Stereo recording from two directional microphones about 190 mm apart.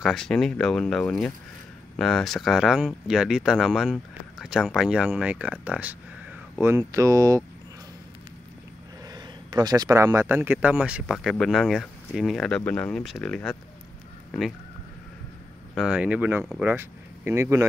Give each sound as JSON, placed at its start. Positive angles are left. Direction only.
{"t": 0.0, "sound": "speech", "side_deg": 0}
{"t": 9.0, "sound": "speech", "side_deg": -20}
{"t": 15.7, "sound": "speech", "side_deg": -5}